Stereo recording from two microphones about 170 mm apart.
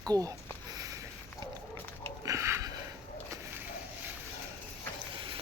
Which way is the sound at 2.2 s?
15° right (ahead or behind).